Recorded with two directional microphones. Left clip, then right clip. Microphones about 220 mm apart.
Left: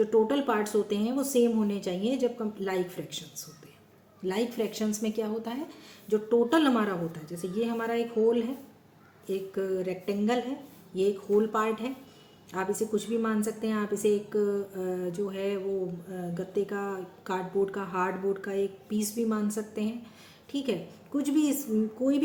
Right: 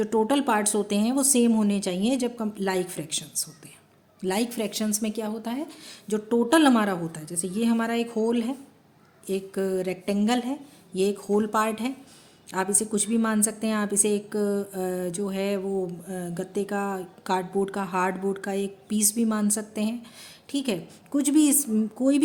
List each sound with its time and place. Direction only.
0.0 s a woman's voice: 50° right (ahead or behind)